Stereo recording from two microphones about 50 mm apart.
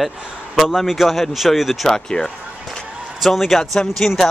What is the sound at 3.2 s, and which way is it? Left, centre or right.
Speech, centre.